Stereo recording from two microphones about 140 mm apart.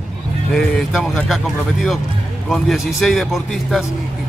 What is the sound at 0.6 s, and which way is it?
Speech, 5° left (ahead or behind).